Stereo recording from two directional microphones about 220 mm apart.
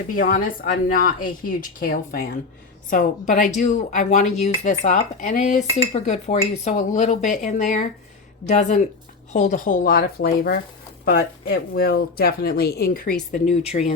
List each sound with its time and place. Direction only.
0.2 s speech: 40° left (ahead or behind)